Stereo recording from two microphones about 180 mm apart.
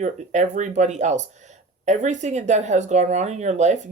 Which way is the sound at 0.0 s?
40° right (ahead or behind).